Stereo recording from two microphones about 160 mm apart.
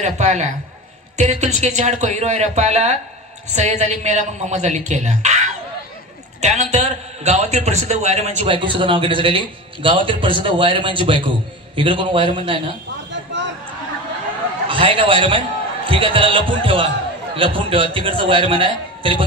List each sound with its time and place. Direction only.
0.0 s a man's voice: 45° right (ahead or behind)
8.5 s a man's voice: 35° right (ahead or behind)
14.7 s a man's voice: 35° right (ahead or behind)